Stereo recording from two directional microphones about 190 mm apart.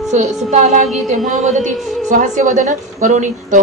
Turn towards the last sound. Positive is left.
turn(degrees=-40)  # may be behind; listen again after turning